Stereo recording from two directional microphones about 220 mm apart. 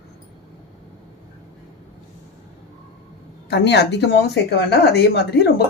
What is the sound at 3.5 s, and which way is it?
A woman's voice, 50° left (ahead or behind).